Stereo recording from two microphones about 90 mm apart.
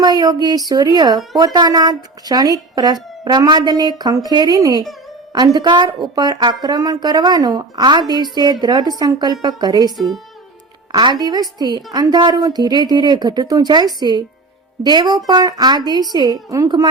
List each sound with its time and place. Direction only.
0.0 s speech: 45° right (ahead or behind)
10.9 s speech: 50° right (ahead or behind)